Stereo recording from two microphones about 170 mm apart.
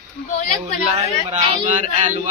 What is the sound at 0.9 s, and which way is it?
Speech, 40° right (ahead or behind).